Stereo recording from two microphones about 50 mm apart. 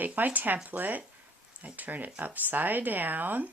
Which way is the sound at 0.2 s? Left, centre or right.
Right.